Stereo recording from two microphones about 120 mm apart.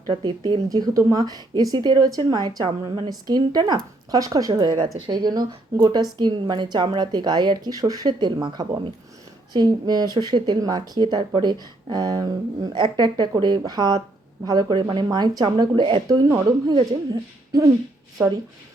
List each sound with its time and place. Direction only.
0.1 s a woman's voice: 40° right (ahead or behind)
16.0 s a woman's voice: 30° right (ahead or behind)
18.2 s speech: 25° right (ahead or behind)